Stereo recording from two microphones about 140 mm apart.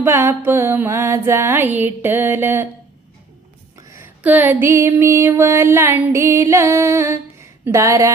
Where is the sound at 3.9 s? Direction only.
15° right (ahead or behind).